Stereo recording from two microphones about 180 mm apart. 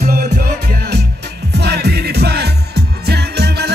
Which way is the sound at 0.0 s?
55° right (ahead or behind).